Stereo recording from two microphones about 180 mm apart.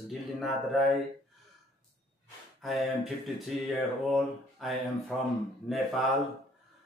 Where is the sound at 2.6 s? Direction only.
Centre (ahead or behind).